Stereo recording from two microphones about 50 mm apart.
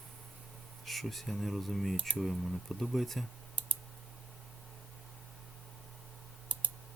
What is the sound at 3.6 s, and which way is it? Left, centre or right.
Clicking, right.